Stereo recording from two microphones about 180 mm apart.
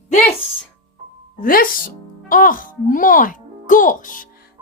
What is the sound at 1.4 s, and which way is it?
A woman's voice, 50° left (ahead or behind).